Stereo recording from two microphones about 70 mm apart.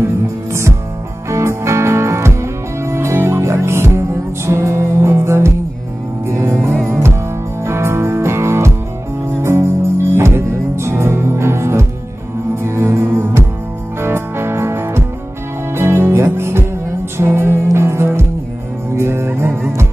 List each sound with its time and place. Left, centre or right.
0.0 s music: right
7.6 s music: right